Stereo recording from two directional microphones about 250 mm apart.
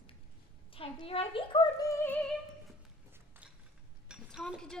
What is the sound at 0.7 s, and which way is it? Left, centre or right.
Speech, left.